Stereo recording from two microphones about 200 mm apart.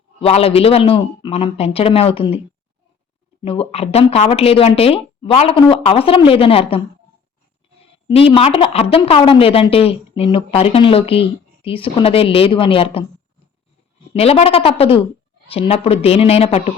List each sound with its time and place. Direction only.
0.2 s speech: 30° left (ahead or behind)
3.4 s speech: 30° left (ahead or behind)
8.0 s speech: 25° left (ahead or behind)
14.1 s a woman's voice: 30° left (ahead or behind)